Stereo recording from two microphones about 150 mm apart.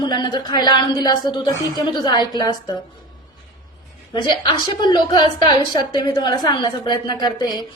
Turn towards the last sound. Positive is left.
turn(degrees=25)  # may be behind; listen again after turning